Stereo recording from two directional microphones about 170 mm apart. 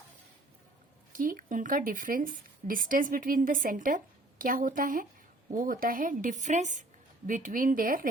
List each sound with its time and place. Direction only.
1.1 s speech: 55° right (ahead or behind)